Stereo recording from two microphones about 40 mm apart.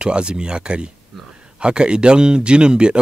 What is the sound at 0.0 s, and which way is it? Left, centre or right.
Speech, right.